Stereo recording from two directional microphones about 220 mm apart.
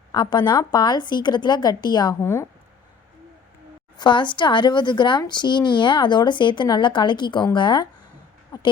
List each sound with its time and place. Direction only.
0.1 s speech: 20° left (ahead or behind)
3.9 s speech: 20° left (ahead or behind)
8.5 s a sound: 15° left (ahead or behind)